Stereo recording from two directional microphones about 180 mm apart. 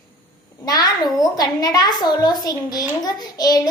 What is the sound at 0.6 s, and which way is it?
A child's voice, 20° left (ahead or behind).